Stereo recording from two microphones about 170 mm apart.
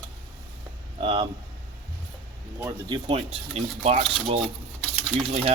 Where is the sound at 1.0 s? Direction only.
35° right (ahead or behind).